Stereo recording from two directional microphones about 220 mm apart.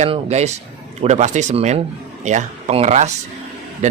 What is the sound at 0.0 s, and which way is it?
A man's voice, 30° right (ahead or behind).